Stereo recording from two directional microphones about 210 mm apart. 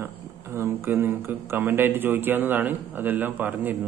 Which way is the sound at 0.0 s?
10° right (ahead or behind).